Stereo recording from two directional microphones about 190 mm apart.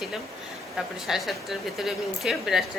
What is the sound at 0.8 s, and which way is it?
Speech, centre (ahead or behind).